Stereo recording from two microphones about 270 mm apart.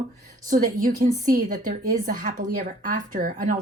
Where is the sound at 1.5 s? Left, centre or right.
Right.